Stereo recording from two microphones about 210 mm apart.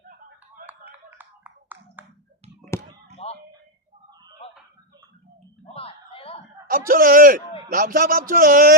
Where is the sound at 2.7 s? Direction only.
10° left (ahead or behind).